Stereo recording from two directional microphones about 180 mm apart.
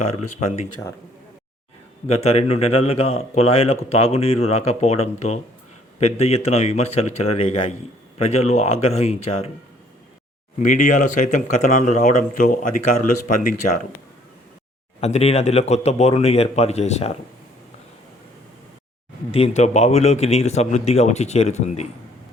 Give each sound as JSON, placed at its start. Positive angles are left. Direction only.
{"t": 0.1, "sound": "speech", "side_deg": 40}
{"t": 2.0, "sound": "speech", "side_deg": 35}
{"t": 10.6, "sound": "speech", "side_deg": 45}
{"t": 15.0, "sound": "speech", "side_deg": 35}
{"t": 19.3, "sound": "speech", "side_deg": 35}